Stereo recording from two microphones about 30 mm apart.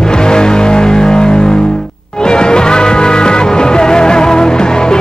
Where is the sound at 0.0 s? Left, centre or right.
Left.